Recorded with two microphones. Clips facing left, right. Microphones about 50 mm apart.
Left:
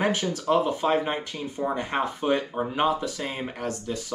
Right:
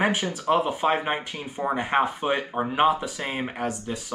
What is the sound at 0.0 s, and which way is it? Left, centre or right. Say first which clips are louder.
Speech: right 1 dB; centre.